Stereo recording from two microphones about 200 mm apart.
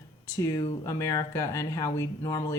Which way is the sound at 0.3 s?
15° left (ahead or behind).